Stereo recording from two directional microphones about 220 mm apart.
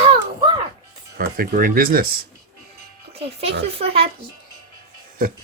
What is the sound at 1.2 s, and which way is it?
Speech, 40° right (ahead or behind).